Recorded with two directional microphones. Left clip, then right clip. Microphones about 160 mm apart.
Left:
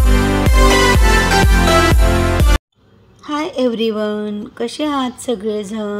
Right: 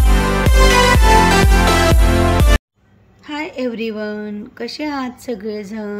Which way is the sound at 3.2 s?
20° left (ahead or behind).